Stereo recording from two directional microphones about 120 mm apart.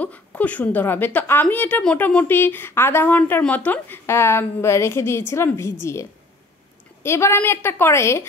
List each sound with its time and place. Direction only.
0.0 s a woman's voice: 10° left (ahead or behind)